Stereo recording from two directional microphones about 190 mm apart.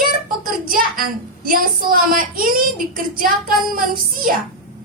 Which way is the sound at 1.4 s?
50° right (ahead or behind).